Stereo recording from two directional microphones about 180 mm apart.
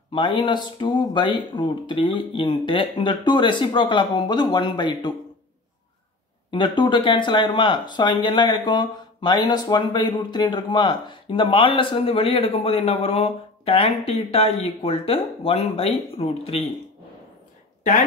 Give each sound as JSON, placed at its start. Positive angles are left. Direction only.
{"t": 0.1, "sound": "speech", "side_deg": 25}
{"t": 6.5, "sound": "speech", "side_deg": 25}